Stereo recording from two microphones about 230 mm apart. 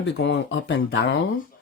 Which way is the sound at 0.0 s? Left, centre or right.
Left.